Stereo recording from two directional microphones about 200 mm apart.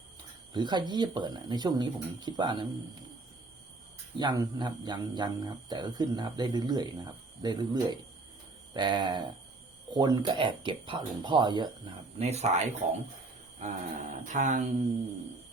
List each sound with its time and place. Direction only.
0.5 s speech: 20° right (ahead or behind)
4.2 s speech: 20° right (ahead or behind)
12.2 s mantra: 30° right (ahead or behind)